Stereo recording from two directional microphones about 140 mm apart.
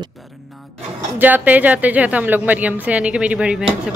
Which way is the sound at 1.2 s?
10° right (ahead or behind).